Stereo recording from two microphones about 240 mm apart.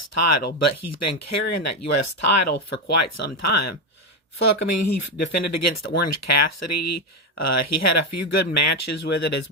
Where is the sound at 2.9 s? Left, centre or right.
Left.